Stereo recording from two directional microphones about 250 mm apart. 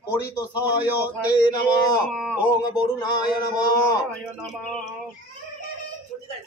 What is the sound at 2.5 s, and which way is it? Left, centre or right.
Speech, centre.